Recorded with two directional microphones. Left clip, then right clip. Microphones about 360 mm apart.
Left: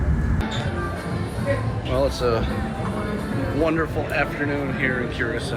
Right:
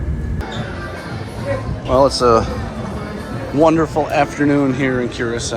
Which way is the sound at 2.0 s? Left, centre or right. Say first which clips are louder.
Right 9 dB; right.